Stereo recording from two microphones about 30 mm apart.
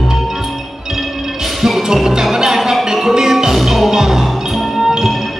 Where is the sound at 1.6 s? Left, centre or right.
Centre.